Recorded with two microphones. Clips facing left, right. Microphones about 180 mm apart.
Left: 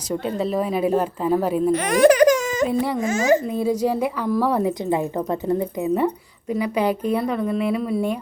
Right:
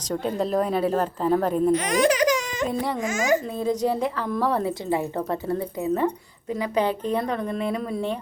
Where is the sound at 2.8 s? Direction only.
10° left (ahead or behind).